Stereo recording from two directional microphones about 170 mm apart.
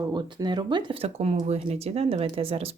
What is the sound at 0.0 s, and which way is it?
Speech, 25° right (ahead or behind).